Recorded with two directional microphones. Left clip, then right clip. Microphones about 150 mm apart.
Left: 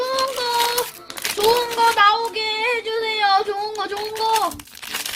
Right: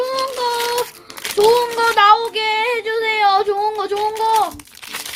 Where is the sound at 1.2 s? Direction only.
Centre (ahead or behind).